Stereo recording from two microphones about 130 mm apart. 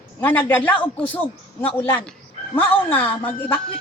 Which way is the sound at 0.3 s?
15° left (ahead or behind).